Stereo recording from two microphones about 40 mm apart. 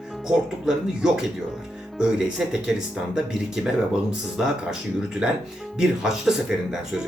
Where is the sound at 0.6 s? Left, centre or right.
Centre.